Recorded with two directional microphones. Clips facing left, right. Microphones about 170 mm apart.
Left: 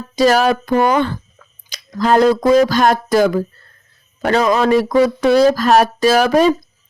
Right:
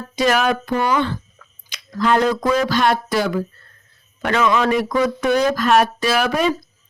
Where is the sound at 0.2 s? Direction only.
35° left (ahead or behind).